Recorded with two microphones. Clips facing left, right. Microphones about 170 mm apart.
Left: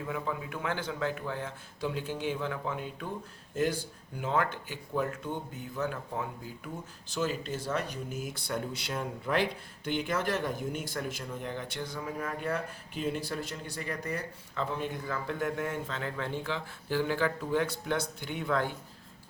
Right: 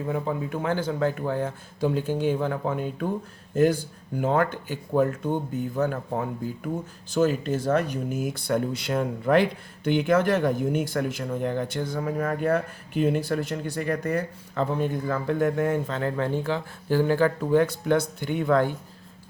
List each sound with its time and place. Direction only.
0.1 s speech: 35° right (ahead or behind)